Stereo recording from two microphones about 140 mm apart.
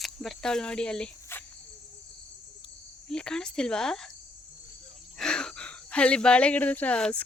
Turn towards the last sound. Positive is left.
turn(degrees=10)  # may be behind; listen again after turning